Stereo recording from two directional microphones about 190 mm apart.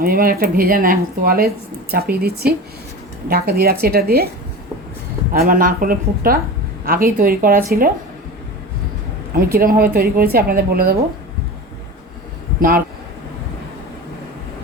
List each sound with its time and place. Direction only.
0.0 s a woman's voice: 50° right (ahead or behind)
5.3 s speech: 45° right (ahead or behind)
9.3 s speech: 50° right (ahead or behind)
12.5 s speech: 50° right (ahead or behind)